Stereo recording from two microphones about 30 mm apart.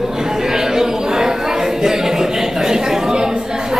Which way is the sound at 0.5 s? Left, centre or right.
Centre.